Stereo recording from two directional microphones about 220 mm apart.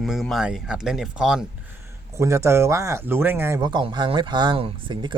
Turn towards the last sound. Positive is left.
turn(degrees=-20)  # may be behind; listen again after turning